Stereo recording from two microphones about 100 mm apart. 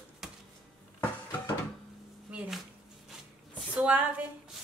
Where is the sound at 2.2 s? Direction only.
10° right (ahead or behind).